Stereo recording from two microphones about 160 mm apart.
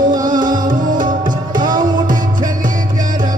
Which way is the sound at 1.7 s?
55° right (ahead or behind).